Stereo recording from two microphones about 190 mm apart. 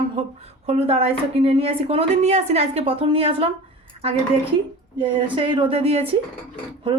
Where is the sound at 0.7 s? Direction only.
35° right (ahead or behind).